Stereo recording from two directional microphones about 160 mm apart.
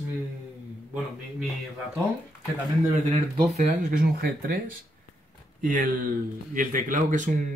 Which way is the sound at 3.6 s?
65° right (ahead or behind).